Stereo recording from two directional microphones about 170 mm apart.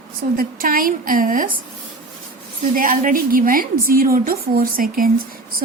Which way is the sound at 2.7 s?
55° right (ahead or behind).